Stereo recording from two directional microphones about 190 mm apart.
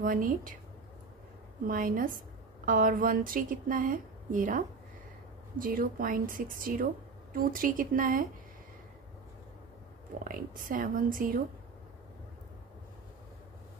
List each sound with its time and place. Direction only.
0.0 s a woman's voice: 45° right (ahead or behind)
1.7 s a woman's voice: 45° right (ahead or behind)
10.1 s a woman's voice: 45° right (ahead or behind)